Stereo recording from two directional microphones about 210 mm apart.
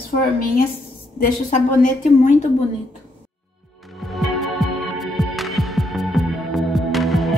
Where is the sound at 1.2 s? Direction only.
35° left (ahead or behind).